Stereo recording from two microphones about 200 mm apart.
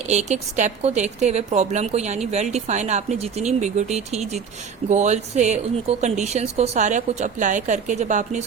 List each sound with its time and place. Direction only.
0.1 s a woman's voice: 35° right (ahead or behind)